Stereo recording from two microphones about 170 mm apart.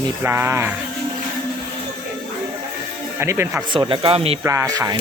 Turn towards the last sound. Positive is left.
turn(degrees=-20)  # may be behind; listen again after turning